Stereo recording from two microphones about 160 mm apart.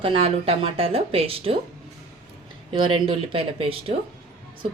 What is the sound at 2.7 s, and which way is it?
Speech, 35° right (ahead or behind).